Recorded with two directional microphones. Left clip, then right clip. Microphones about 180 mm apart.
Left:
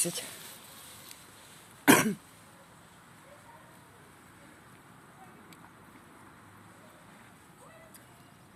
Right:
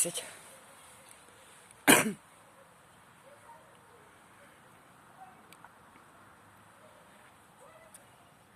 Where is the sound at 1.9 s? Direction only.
30° right (ahead or behind).